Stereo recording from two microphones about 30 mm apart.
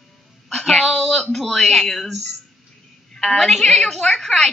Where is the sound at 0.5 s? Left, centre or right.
Centre.